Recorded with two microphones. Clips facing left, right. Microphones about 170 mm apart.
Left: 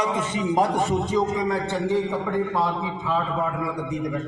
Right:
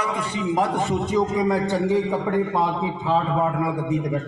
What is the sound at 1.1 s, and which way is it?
Speech, 5° right (ahead or behind).